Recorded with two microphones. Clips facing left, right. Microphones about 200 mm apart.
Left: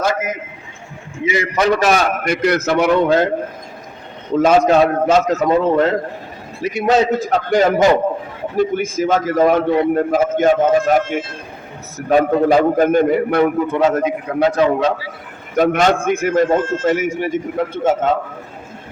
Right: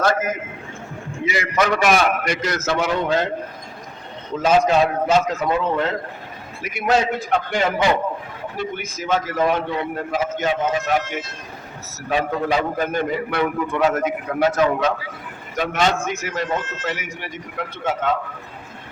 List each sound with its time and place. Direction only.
0.0 s a sound: 10° left (ahead or behind)
1.2 s a man's voice: 25° left (ahead or behind)
2.1 s a man's voice: 55° left (ahead or behind)
4.7 s a man's voice: 45° left (ahead or behind)
13.7 s a man's voice: 25° left (ahead or behind)
15.5 s a man's voice: 50° left (ahead or behind)